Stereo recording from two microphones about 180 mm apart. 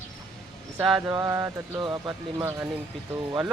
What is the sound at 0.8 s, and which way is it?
Mantra, 10° right (ahead or behind).